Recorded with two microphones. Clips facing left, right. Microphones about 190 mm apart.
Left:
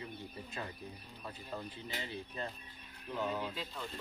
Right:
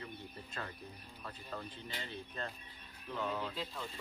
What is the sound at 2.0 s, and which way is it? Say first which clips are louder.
Speech: left 1 dB; 10° left (ahead or behind).